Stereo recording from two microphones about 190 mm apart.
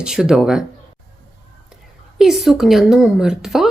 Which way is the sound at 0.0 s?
5° right (ahead or behind).